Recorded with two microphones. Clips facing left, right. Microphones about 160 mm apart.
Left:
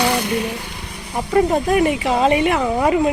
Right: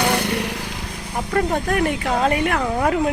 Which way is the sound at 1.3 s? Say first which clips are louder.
Left 5 dB; 5° left (ahead or behind).